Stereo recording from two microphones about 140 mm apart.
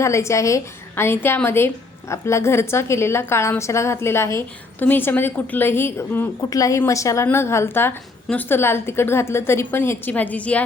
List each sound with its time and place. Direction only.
0.0 s a woman's voice: 20° left (ahead or behind)